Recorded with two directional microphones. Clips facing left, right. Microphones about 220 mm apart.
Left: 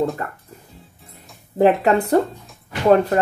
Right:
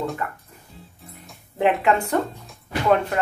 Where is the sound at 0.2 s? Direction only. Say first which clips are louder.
Even; 40° left (ahead or behind).